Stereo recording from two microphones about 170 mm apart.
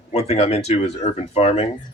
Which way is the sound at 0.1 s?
35° left (ahead or behind).